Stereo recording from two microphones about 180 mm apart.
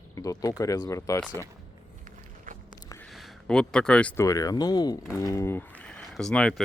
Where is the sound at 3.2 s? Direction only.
5° left (ahead or behind).